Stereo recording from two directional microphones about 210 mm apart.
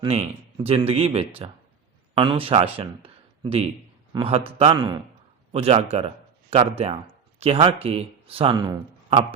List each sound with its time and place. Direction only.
0.0 s a man's voice: 25° right (ahead or behind)